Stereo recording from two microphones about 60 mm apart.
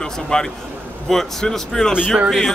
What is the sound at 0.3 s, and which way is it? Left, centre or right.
Speech, centre.